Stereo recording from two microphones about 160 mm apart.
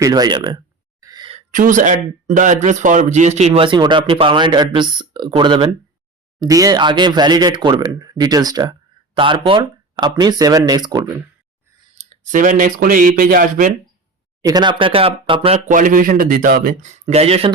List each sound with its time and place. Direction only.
0.0 s speech: 25° right (ahead or behind)
1.0 s a sound: 25° right (ahead or behind)
1.5 s a man's voice: 55° right (ahead or behind); by 11.0 s 25° right (ahead or behind)
12.2 s speech: 50° right (ahead or behind)
14.4 s a man's voice: 25° right (ahead or behind)
15.5 s speech: 50° right (ahead or behind)
16.8 s a man's voice: 45° right (ahead or behind)